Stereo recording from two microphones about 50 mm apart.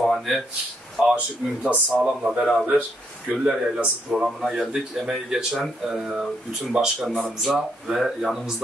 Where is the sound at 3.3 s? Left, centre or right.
Centre.